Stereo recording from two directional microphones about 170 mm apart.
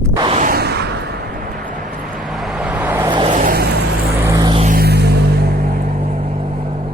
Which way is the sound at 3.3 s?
55° right (ahead or behind).